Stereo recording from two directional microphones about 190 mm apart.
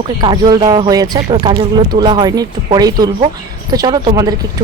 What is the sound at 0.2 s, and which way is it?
Speech, 20° right (ahead or behind).